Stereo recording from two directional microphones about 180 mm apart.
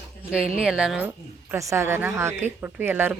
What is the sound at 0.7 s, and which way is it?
A woman's voice, 5° right (ahead or behind).